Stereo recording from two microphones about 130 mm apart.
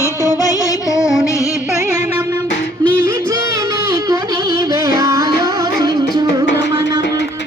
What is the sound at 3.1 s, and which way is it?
Music, 25° right (ahead or behind).